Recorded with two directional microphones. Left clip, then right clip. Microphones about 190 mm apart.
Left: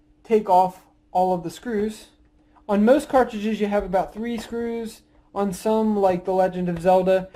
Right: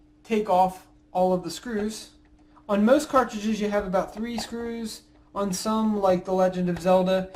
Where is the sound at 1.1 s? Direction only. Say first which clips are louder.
Left 2 dB; 55° left (ahead or behind).